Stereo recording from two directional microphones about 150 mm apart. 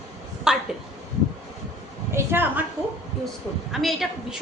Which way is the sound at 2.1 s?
15° right (ahead or behind).